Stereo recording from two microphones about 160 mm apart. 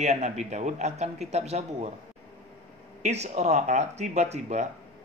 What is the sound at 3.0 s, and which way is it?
A man's voice, 45° right (ahead or behind).